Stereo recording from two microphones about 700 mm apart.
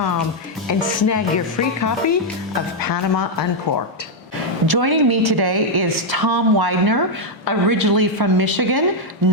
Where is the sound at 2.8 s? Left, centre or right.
Left.